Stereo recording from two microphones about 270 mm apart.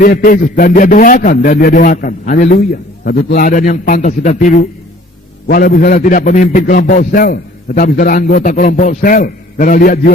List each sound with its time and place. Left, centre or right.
0.0 s a man's voice: left